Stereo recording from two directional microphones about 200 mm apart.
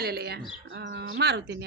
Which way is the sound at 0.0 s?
55° right (ahead or behind).